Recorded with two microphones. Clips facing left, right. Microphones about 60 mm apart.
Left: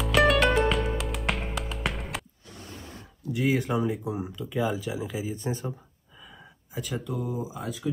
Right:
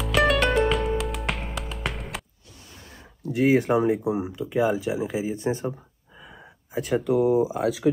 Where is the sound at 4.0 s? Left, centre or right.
Centre.